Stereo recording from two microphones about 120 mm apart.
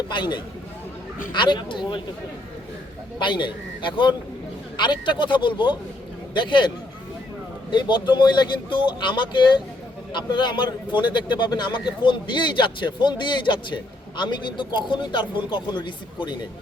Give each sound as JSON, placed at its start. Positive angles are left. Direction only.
{"t": 0.1, "sound": "a man's voice", "side_deg": 40}
{"t": 3.2, "sound": "a man's voice", "side_deg": 40}